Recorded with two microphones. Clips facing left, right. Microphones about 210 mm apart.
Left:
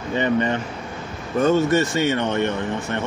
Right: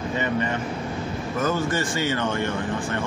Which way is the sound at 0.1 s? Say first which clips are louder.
Left 6 dB; 30° left (ahead or behind).